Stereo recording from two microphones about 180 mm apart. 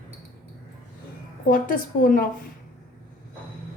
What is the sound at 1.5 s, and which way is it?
Speech, 50° left (ahead or behind).